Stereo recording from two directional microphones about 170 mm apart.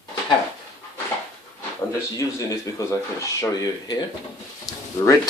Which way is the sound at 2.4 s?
20° left (ahead or behind).